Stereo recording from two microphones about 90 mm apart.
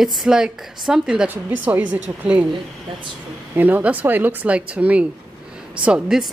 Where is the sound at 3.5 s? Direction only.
20° right (ahead or behind).